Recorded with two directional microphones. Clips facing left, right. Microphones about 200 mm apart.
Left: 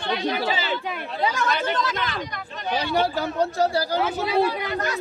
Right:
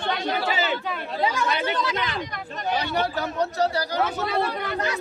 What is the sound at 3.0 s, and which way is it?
Speech, 30° left (ahead or behind).